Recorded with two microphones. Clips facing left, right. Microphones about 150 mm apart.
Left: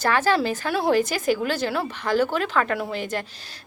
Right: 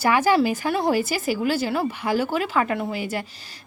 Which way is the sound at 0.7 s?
Centre (ahead or behind).